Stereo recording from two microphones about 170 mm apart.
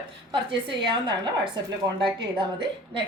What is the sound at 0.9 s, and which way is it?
A woman's voice, 25° right (ahead or behind).